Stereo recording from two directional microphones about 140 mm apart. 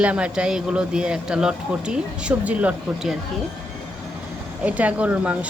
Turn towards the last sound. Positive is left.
turn(degrees=-10)  # may be behind; listen again after turning